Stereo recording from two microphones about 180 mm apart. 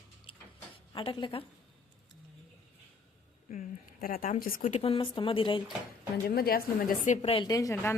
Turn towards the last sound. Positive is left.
turn(degrees=15)  # may be behind; listen again after turning